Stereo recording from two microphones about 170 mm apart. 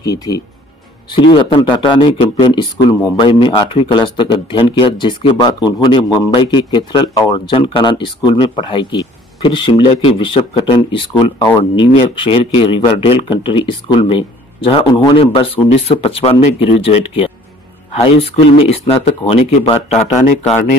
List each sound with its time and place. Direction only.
0.0 s speech: 20° left (ahead or behind); by 20.6 s 45° left (ahead or behind)